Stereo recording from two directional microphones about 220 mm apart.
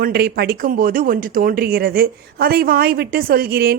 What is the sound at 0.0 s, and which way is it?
Speech, 45° right (ahead or behind).